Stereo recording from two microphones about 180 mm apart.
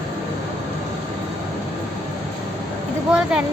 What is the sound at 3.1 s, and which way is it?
Speech, 5° right (ahead or behind).